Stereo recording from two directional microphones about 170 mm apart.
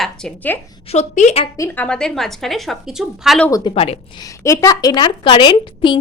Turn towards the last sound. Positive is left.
turn(degrees=30)  # may be behind; listen again after turning